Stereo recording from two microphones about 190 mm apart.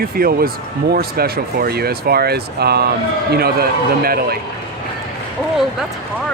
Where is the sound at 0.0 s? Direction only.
50° right (ahead or behind).